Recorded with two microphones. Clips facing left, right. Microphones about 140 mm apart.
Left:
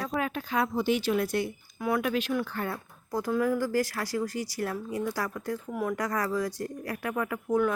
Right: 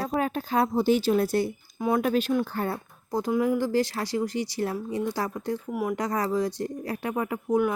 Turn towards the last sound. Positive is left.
turn(degrees=-20)  # may be behind; listen again after turning